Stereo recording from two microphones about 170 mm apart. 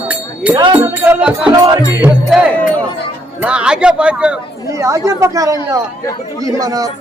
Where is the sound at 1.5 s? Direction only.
20° right (ahead or behind).